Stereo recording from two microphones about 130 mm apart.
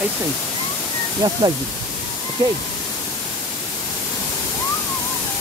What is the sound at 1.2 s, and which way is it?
Speech, 30° right (ahead or behind).